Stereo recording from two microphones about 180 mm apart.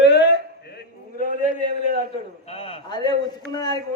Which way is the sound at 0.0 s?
70° left (ahead or behind).